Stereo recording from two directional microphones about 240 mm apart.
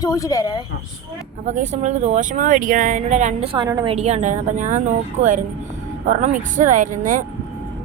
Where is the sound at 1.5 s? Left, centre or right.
Right.